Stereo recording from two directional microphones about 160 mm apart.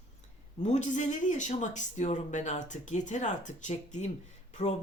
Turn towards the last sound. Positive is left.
turn(degrees=45)  # may be behind; listen again after turning